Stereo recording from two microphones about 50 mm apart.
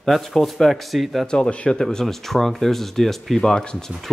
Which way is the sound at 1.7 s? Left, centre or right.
Centre.